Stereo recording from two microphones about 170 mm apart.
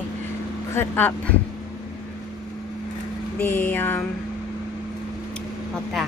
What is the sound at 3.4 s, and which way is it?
Speech, 10° left (ahead or behind).